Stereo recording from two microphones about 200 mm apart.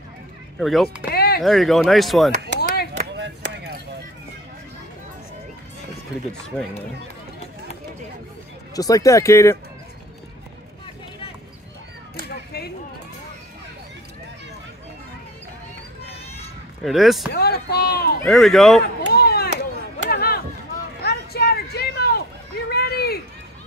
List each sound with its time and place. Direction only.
0.6 s speech: centre (ahead or behind)
0.8 s speech: 50° left (ahead or behind)
1.4 s speech: centre (ahead or behind)
2.3 s chop: 35° right (ahead or behind)
3.2 s chop: 60° right (ahead or behind)
6.5 s speech: 5° left (ahead or behind)
8.7 s speech: 15° left (ahead or behind)
12.3 s a sound: 50° left (ahead or behind)
16.8 s speech: centre (ahead or behind)
17.3 s speech: 50° left (ahead or behind)
18.2 s speech: centre (ahead or behind)
19.1 s chop: 50° left (ahead or behind)
21.0 s a sound: 50° left (ahead or behind)